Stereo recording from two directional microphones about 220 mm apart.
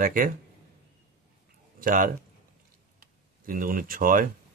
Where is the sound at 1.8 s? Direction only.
40° right (ahead or behind).